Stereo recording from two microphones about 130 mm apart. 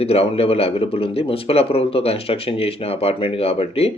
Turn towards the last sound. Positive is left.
turn(degrees=50)  # may be behind; listen again after turning